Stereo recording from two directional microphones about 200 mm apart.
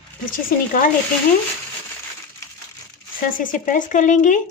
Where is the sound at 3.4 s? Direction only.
40° left (ahead or behind).